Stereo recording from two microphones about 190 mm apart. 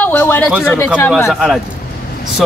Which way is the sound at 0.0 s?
10° left (ahead or behind).